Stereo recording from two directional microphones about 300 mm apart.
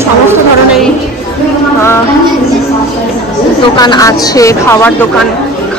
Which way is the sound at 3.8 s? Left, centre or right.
Centre.